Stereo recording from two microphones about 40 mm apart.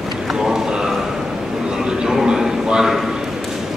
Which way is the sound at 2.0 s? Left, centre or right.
Centre.